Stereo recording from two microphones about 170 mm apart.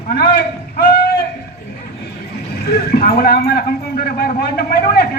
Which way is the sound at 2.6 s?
70° left (ahead or behind).